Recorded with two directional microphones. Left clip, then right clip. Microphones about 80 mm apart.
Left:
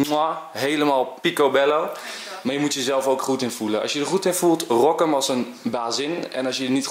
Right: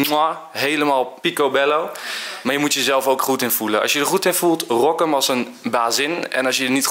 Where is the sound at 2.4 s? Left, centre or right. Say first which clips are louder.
Right 5 dB; right.